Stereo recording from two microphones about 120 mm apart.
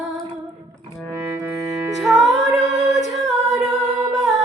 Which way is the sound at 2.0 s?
Centre (ahead or behind).